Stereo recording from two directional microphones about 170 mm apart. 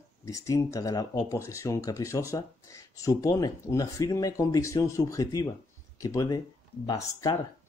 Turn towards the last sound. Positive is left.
turn(degrees=20)  # may be behind; listen again after turning